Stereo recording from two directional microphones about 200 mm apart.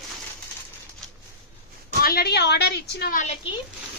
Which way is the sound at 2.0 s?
50° left (ahead or behind).